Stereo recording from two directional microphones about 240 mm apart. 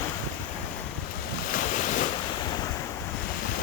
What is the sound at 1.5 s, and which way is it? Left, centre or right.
Waves, left.